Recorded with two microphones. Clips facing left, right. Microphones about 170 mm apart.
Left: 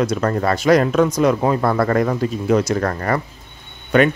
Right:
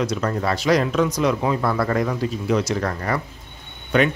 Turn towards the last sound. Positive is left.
turn(degrees=50)  # may be behind; listen again after turning